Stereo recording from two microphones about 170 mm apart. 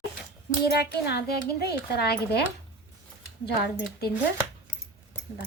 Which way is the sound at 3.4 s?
70° left (ahead or behind).